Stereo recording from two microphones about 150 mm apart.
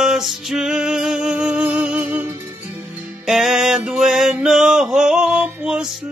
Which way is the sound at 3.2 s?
Centre (ahead or behind).